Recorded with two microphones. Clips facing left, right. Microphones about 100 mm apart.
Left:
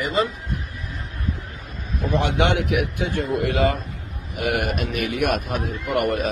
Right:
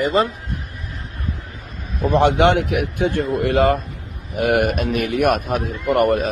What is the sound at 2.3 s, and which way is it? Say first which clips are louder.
Speech: right 4 dB; 40° right (ahead or behind).